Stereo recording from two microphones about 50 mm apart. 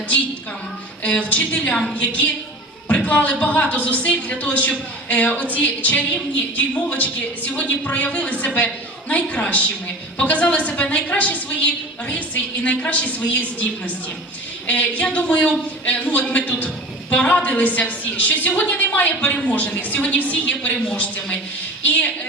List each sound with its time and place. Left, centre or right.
1.0 s a woman's voice: left